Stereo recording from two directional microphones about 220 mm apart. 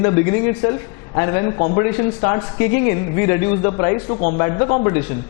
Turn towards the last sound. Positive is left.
turn(degrees=25)  # may be behind; listen again after turning